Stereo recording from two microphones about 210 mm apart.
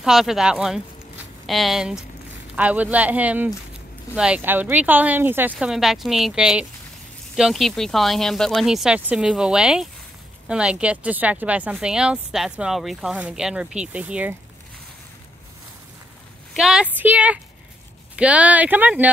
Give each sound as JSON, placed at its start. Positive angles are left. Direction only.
{"t": 0.0, "sound": "a woman's voice", "side_deg": 0}
{"t": 16.5, "sound": "a woman's voice", "side_deg": -5}